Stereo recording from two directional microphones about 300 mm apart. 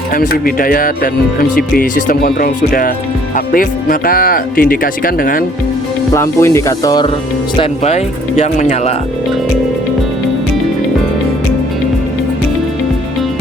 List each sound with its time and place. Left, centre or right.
0.1 s speech: left
6.1 s speech: centre